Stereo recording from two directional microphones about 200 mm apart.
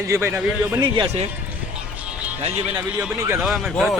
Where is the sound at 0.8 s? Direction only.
25° right (ahead or behind).